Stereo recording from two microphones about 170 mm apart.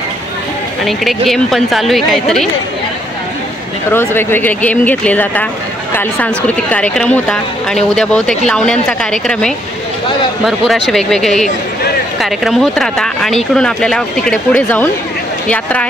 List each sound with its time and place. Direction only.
0.8 s speech: centre (ahead or behind)
3.9 s speech: 15° left (ahead or behind)